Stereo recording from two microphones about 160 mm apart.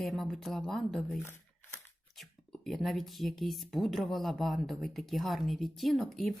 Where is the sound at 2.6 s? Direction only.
Centre (ahead or behind).